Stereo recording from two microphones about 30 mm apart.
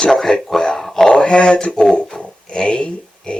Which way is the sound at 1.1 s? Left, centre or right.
Left.